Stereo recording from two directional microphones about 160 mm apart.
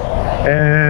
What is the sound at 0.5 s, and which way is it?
Speech, 15° left (ahead or behind).